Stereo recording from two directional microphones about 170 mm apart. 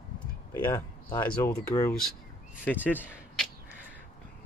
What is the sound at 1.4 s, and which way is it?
Speech, 20° left (ahead or behind).